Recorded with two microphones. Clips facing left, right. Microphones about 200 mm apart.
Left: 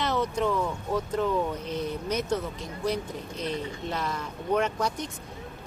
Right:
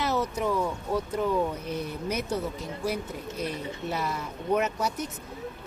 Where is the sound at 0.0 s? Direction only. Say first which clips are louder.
Left 1 dB; 5° right (ahead or behind).